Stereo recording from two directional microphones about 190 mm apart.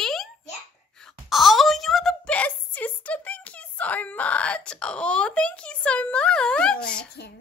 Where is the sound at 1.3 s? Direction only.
Centre (ahead or behind).